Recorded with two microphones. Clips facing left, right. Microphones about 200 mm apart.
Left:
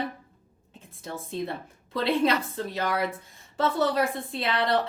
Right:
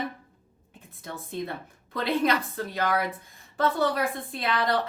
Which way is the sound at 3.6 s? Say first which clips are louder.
Left 1 dB; 25° left (ahead or behind).